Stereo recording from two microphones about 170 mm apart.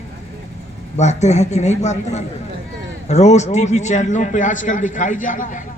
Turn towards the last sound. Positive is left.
turn(degrees=50)  # may be behind; listen again after turning